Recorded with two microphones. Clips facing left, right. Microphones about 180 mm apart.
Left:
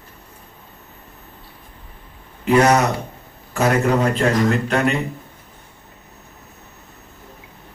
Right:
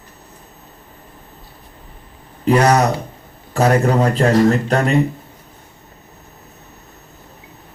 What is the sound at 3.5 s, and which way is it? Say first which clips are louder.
A man's voice: right 3 dB; 35° right (ahead or behind).